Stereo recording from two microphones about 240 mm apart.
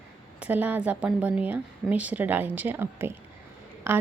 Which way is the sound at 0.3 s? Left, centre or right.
Centre.